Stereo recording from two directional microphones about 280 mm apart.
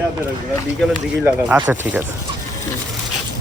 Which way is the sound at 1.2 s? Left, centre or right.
Centre.